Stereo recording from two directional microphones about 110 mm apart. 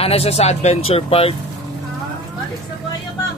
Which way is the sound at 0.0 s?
65° left (ahead or behind).